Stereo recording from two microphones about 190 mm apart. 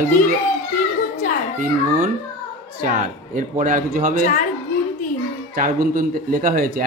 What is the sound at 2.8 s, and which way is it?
A man's voice, 45° right (ahead or behind).